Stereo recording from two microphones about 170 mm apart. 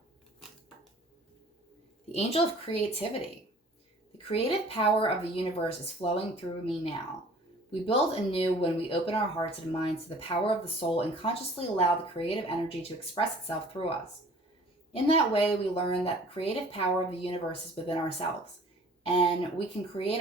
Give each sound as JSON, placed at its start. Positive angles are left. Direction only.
{"t": 2.1, "sound": "speech", "side_deg": 35}
{"t": 14.9, "sound": "speech", "side_deg": 35}